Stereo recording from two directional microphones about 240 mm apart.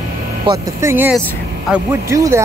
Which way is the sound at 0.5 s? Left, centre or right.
Centre.